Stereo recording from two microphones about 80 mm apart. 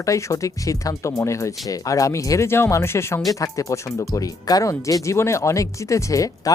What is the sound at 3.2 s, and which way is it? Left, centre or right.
Speech, left.